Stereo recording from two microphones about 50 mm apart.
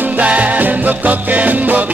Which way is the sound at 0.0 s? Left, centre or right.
Right.